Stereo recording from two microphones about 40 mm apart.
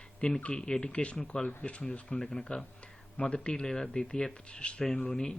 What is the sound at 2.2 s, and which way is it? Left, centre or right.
Speech, centre.